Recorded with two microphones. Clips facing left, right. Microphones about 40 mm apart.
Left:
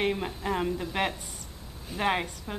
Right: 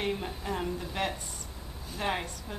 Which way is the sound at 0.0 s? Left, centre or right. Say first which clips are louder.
Left 4 dB; left.